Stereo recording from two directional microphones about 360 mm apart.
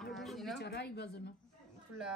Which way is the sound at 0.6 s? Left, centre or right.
Left.